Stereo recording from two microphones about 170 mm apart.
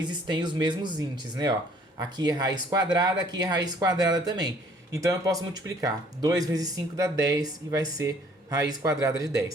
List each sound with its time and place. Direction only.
0.0 s speech: 25° right (ahead or behind)